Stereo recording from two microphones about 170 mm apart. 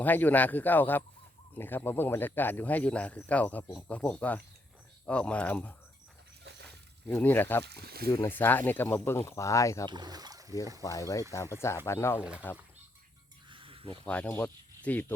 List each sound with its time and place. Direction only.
0.0 s speech: 10° left (ahead or behind)
6.7 s a sound: 10° left (ahead or behind)
7.6 s speech: 70° right (ahead or behind)
8.1 s speech: 15° left (ahead or behind)
9.9 s speech: 25° right (ahead or behind)
10.8 s speech: 20° left (ahead or behind)
13.5 s a sound: 30° right (ahead or behind)
14.1 s speech: 10° left (ahead or behind)